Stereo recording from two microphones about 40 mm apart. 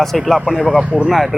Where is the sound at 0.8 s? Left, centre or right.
Right.